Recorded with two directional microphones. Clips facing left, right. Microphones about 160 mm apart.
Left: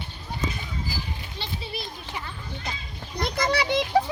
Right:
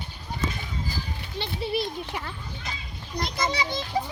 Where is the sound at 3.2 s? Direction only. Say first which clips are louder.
Left 3 dB; 55° left (ahead or behind).